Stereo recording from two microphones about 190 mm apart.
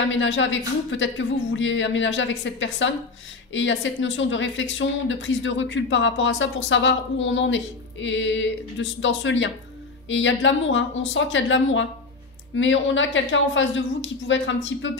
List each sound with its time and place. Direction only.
0.1 s speech: 80° left